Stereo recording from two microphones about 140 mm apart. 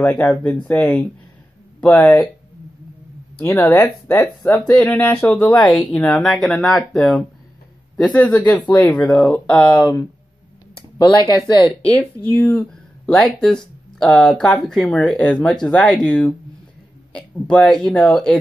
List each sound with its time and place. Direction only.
0.0 s speech: 10° left (ahead or behind)
3.4 s speech: 15° left (ahead or behind)
9.7 s speech: 30° left (ahead or behind)
11.8 s speech: 5° left (ahead or behind)